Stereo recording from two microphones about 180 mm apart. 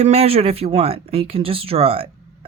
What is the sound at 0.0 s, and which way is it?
A man's voice, 35° right (ahead or behind).